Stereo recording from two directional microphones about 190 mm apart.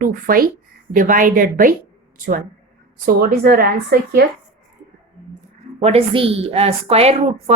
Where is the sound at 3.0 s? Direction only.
50° right (ahead or behind).